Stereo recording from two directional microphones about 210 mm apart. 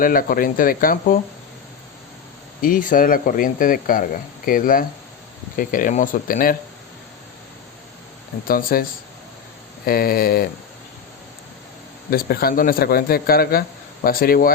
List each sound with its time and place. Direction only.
0.0 s speech: 40° left (ahead or behind)
2.6 s speech: 40° left (ahead or behind)
8.4 s a man's voice: 45° left (ahead or behind)
12.1 s a man's voice: 45° left (ahead or behind)